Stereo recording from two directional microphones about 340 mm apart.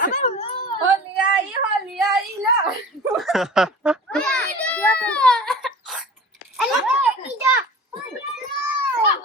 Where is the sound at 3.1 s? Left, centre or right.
Centre.